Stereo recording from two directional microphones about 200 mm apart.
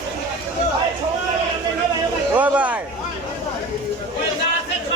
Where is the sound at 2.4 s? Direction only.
5° right (ahead or behind).